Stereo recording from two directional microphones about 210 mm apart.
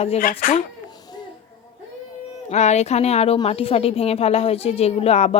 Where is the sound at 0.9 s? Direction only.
20° left (ahead or behind).